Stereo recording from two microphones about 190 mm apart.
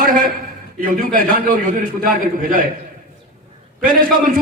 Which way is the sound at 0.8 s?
45° right (ahead or behind).